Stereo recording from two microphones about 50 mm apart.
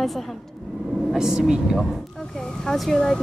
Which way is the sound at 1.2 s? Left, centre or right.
Centre.